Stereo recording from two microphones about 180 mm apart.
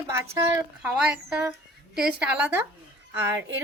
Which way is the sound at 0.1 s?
15° right (ahead or behind).